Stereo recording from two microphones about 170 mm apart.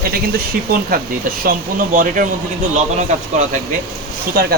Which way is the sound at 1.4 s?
55° right (ahead or behind).